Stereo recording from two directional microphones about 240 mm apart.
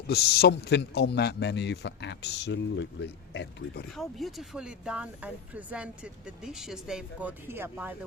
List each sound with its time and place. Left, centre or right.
0.1 s a man's voice: left
3.9 s speech: centre